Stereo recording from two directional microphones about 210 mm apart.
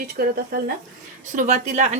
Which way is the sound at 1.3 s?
35° right (ahead or behind).